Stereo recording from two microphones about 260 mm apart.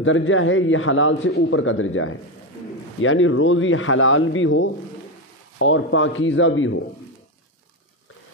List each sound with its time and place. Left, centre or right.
0.0 s a man's voice: left